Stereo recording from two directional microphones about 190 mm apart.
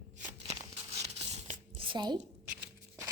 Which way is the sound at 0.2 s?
40° right (ahead or behind).